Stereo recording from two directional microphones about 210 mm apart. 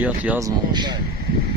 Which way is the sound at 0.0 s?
10° right (ahead or behind).